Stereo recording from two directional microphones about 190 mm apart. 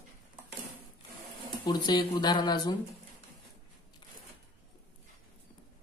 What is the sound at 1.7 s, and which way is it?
Speech, 20° left (ahead or behind).